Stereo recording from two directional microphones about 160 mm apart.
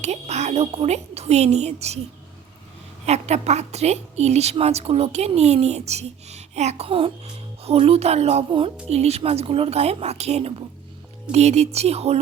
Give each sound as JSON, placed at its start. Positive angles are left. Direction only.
{"t": 0.0, "sound": "a woman's voice", "side_deg": -45}
{"t": 3.1, "sound": "a woman's voice", "side_deg": -45}